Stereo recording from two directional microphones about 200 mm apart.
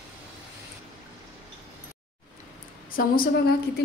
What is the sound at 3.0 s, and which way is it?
Speech, 45° left (ahead or behind).